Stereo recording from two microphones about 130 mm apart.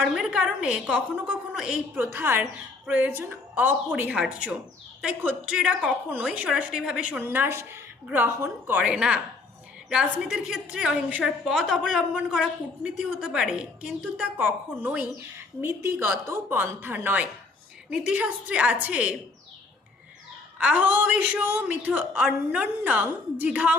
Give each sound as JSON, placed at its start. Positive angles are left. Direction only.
{"t": 0.0, "sound": "a woman's voice", "side_deg": -5}
{"t": 2.0, "sound": "a woman's voice", "side_deg": -15}
{"t": 20.6, "sound": "a woman's voice", "side_deg": -10}